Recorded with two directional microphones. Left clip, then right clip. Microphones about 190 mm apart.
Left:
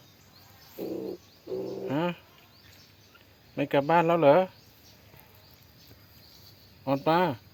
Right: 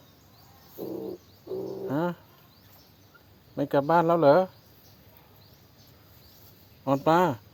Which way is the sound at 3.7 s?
5° right (ahead or behind).